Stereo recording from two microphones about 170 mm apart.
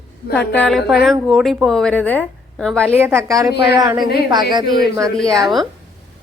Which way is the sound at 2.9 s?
10° right (ahead or behind).